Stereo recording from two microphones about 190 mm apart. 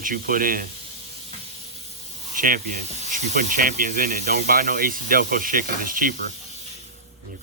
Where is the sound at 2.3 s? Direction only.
45° right (ahead or behind).